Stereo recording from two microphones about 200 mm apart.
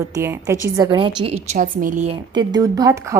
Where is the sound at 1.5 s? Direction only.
40° right (ahead or behind).